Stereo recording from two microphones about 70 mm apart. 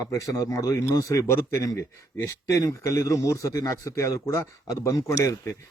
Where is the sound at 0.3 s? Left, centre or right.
Left.